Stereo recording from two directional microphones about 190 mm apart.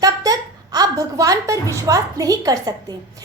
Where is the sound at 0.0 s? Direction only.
20° right (ahead or behind).